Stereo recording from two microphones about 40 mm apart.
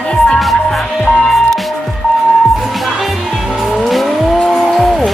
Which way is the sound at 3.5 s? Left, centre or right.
Centre.